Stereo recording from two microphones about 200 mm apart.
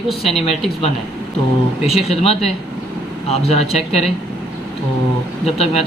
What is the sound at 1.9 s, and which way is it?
Speech, 30° left (ahead or behind).